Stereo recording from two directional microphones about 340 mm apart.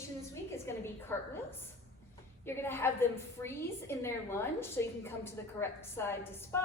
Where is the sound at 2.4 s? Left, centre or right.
Centre.